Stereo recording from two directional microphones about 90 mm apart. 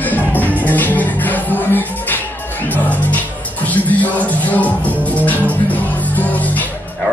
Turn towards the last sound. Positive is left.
turn(degrees=20)  # may be behind; listen again after turning